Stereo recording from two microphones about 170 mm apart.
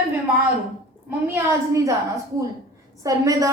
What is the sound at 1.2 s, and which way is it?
Speech, 15° right (ahead or behind).